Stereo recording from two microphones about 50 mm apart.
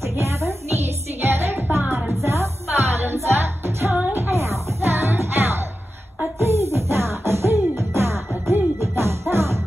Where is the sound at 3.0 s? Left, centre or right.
Right.